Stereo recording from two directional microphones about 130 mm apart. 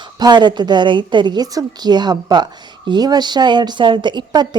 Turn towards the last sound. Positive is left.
turn(degrees=-35)  # may be behind; listen again after turning